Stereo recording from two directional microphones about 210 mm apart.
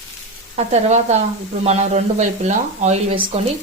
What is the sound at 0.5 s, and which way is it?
Speech, 30° right (ahead or behind).